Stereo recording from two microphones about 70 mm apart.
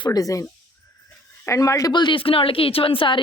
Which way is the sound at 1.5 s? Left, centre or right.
Left.